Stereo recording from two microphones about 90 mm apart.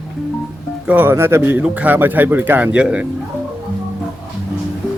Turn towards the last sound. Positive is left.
turn(degrees=-10)  # may be behind; listen again after turning